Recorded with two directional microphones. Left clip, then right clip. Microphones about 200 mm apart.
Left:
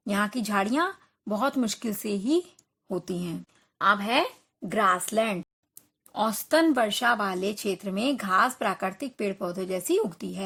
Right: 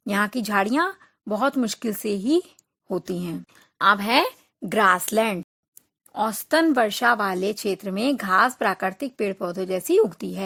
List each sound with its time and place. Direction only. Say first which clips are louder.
0.0 s speech: right 4 dB; 35° right (ahead or behind)
6.1 s speech: right 2 dB; 25° right (ahead or behind)